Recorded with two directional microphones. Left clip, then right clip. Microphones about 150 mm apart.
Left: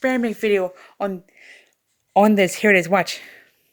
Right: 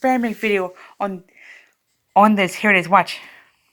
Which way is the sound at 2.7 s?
80° left.